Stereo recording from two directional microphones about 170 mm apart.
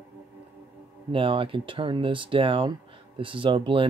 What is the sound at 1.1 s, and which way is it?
Speech, 30° right (ahead or behind).